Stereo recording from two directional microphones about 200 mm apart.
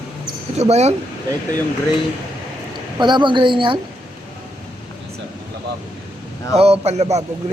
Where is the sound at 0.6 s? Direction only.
35° right (ahead or behind).